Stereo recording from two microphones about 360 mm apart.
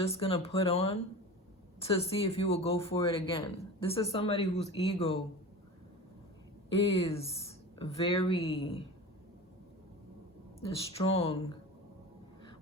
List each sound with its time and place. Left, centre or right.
0.0 s speech: centre
6.7 s speech: centre
10.6 s speech: centre